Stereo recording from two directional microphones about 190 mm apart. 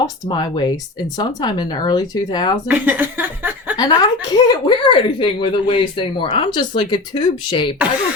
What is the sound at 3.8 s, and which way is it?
Speech, 20° left (ahead or behind).